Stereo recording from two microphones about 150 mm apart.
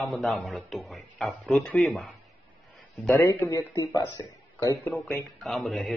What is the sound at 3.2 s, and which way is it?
Speech, 15° left (ahead or behind).